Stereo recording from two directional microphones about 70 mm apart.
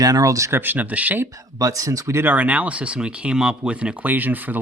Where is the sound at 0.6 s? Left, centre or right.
Right.